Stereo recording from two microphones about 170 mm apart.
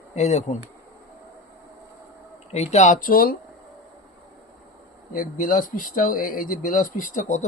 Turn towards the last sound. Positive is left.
turn(degrees=45)  # may be behind; listen again after turning